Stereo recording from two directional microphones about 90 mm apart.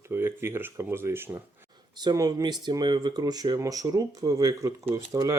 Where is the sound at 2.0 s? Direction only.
50° right (ahead or behind).